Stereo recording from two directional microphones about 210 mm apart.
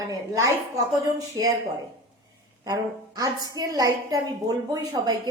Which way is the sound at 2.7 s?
20° right (ahead or behind).